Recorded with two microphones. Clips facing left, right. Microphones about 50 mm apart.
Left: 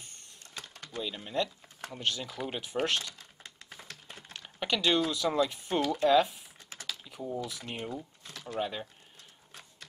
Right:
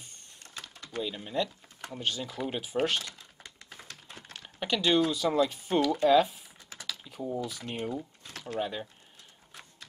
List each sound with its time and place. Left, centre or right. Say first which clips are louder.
1.0 s speech: even; centre
4.4 s speech: right 1 dB; centre
7.1 s typing: right 3 dB; centre
7.4 s speech: right 3 dB; centre
8.3 s a sound: right 1 dB; right
8.5 s speech: right 1 dB; centre